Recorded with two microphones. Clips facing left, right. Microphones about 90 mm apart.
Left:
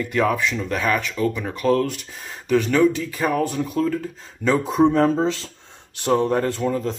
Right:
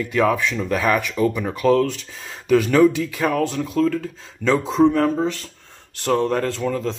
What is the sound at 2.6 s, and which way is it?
Speech, 5° right (ahead or behind).